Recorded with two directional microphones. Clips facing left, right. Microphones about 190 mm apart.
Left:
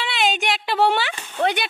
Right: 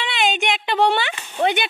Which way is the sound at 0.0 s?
Centre (ahead or behind).